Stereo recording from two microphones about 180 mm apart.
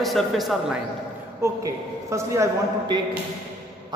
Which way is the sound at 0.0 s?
Centre (ahead or behind).